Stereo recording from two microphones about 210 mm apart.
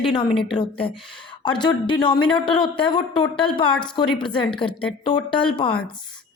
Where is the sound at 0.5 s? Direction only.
25° left (ahead or behind).